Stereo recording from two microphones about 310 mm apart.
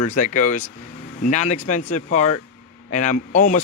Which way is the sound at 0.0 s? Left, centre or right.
Left.